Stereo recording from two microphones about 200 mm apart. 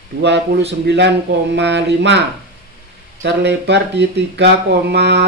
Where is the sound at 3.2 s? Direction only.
60° right (ahead or behind).